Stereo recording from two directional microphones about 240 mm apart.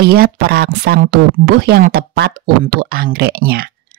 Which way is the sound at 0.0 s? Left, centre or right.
Right.